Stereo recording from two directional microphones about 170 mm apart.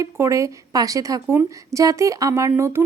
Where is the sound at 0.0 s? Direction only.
15° right (ahead or behind).